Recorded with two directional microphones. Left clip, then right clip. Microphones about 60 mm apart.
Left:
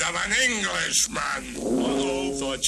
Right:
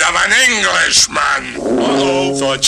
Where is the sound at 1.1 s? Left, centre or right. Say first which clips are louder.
Right 14 dB; centre.